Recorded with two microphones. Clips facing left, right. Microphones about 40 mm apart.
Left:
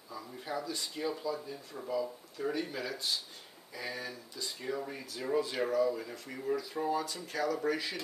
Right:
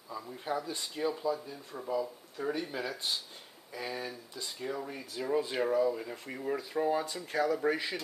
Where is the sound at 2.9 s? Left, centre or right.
Right.